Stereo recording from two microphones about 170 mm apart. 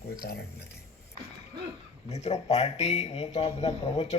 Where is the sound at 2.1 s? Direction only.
40° left (ahead or behind).